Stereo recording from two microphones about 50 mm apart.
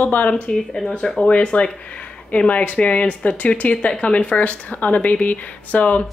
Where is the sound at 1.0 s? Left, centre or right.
Centre; by 6.0 s left.